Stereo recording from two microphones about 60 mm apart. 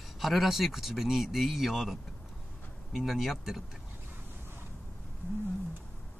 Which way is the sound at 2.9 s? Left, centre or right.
Centre.